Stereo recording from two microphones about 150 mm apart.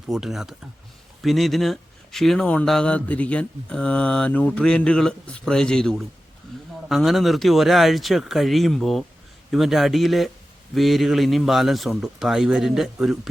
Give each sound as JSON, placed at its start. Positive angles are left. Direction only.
{"t": 0.1, "sound": "speech", "side_deg": -5}